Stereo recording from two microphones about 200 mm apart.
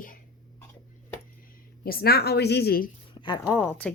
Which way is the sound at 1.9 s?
50° left (ahead or behind).